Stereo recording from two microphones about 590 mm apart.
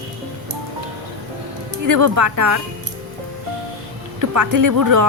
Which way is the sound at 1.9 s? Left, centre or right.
Right.